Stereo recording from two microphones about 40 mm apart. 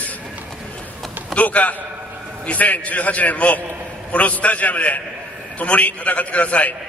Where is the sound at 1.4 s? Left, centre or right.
Left.